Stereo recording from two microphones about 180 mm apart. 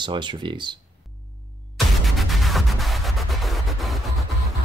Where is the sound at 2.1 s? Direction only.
Centre (ahead or behind).